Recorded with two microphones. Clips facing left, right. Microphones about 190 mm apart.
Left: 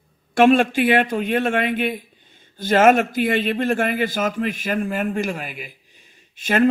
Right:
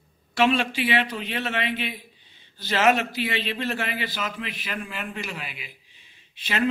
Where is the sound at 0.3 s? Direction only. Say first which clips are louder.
Left 8 dB; 50° left (ahead or behind).